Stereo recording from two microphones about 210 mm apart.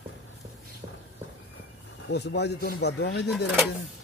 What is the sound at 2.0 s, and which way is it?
Speech, 55° left (ahead or behind).